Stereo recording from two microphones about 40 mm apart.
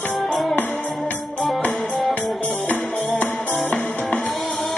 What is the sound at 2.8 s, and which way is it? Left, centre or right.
Music, centre.